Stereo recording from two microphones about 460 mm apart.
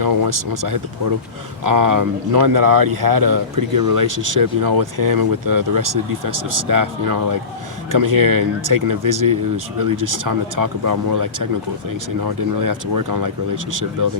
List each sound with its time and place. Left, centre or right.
0.0 s speech: right